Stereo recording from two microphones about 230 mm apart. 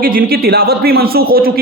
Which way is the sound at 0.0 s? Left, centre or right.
Right.